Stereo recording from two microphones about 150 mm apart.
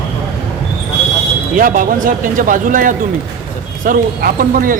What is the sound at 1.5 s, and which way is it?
Speech, 65° right (ahead or behind).